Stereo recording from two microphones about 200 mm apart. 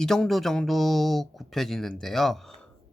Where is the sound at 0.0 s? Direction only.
Centre (ahead or behind).